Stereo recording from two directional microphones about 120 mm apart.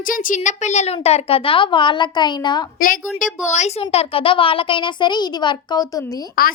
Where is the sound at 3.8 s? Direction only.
50° left (ahead or behind); by 6.0 s 35° left (ahead or behind).